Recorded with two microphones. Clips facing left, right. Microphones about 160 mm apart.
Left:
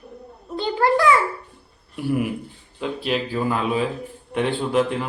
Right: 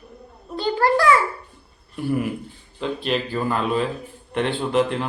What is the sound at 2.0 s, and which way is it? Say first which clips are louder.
A man's voice: even; 10° left (ahead or behind).